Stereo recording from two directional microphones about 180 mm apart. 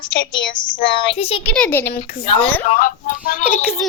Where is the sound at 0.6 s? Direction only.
30° left (ahead or behind).